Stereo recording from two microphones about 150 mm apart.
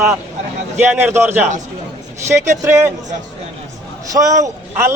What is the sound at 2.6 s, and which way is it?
Speech, 20° right (ahead or behind).